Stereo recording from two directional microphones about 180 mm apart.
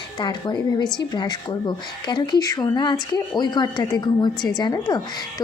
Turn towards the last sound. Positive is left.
turn(degrees=25)  # may be behind; listen again after turning